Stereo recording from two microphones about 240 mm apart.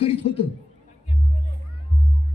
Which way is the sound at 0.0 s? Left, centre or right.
Left.